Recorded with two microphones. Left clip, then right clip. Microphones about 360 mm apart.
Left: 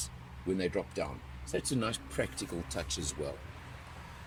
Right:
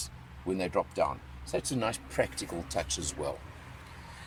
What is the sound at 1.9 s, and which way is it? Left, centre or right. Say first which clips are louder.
Speech: right 5 dB; centre.